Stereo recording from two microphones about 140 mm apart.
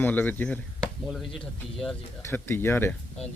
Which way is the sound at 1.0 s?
Centre (ahead or behind).